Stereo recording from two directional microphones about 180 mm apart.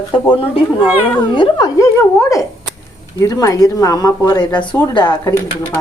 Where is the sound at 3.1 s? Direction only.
20° left (ahead or behind).